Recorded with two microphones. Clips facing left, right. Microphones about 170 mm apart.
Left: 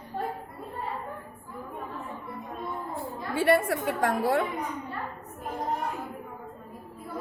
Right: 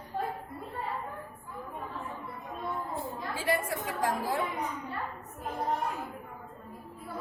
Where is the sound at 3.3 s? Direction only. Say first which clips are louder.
Left 8 dB; 65° left (ahead or behind).